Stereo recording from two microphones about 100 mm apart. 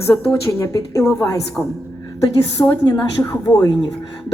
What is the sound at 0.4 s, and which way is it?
Speech, 30° left (ahead or behind).